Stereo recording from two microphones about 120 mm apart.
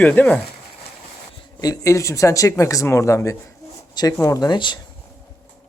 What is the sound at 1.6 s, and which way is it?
Speech, 30° left (ahead or behind).